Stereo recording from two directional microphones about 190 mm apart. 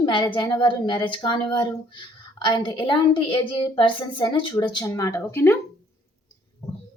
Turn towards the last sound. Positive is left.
turn(degrees=15)  # may be behind; listen again after turning